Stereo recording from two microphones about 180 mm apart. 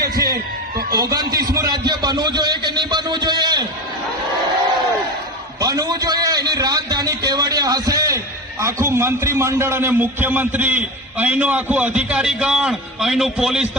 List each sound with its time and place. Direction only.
0.1 s a man's voice: 55° right (ahead or behind)
0.9 s a man's voice: 20° right (ahead or behind)
5.5 s a sound: 20° right (ahead or behind)
8.6 s a man's voice: 15° right (ahead or behind)